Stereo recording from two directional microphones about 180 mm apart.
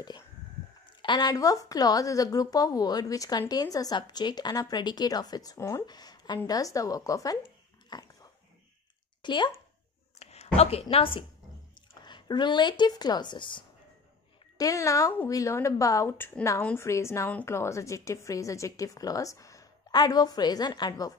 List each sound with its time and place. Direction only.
1.0 s speech: 25° left (ahead or behind)
7.9 s dog: 20° left (ahead or behind)
9.2 s speech: 25° left (ahead or behind)
10.1 s a woman's voice: 35° left (ahead or behind)